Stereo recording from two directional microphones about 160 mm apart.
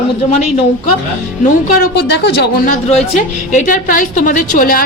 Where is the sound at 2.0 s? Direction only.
90° left.